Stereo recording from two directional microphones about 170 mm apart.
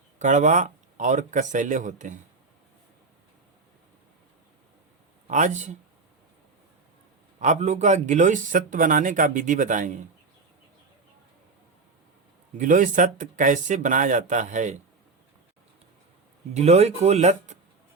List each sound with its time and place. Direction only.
0.2 s speech: 45° right (ahead or behind)
5.3 s speech: 45° right (ahead or behind)
7.3 s speech: 45° right (ahead or behind)
12.5 s speech: 50° right (ahead or behind)
16.6 s speech: 40° right (ahead or behind)